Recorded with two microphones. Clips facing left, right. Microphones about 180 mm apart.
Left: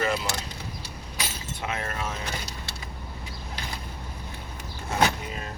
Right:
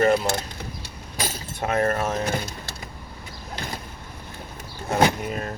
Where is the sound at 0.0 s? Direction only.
45° right (ahead or behind).